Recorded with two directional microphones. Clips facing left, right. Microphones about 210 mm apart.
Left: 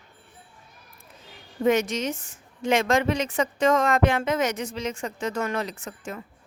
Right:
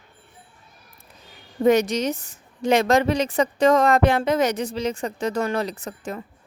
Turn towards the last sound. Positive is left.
turn(degrees=-35)  # may be behind; listen again after turning